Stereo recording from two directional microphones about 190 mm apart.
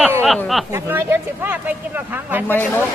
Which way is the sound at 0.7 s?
10° right (ahead or behind).